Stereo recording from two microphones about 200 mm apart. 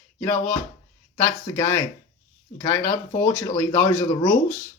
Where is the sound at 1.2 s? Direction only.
10° left (ahead or behind).